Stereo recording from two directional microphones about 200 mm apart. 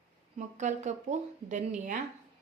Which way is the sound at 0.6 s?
35° right (ahead or behind).